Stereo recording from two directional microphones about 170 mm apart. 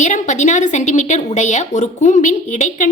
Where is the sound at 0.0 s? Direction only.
45° left (ahead or behind).